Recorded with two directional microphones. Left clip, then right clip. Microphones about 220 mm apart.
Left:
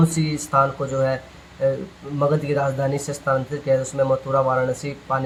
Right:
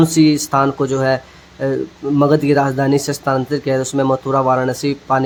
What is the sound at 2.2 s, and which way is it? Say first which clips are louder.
Speech: right 6 dB; 45° right (ahead or behind).